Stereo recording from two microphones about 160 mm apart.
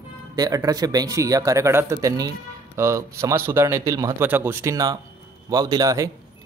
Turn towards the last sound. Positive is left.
turn(degrees=-20)  # may be behind; listen again after turning